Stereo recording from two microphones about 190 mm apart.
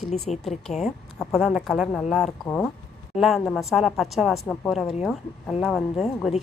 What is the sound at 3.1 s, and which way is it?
A woman's voice, centre (ahead or behind).